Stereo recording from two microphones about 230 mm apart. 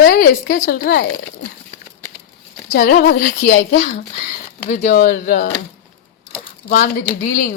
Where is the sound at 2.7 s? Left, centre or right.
Left.